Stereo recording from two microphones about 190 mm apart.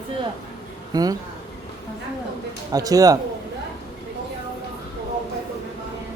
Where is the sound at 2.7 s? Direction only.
20° right (ahead or behind).